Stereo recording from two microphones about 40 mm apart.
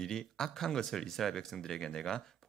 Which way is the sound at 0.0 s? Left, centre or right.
Centre.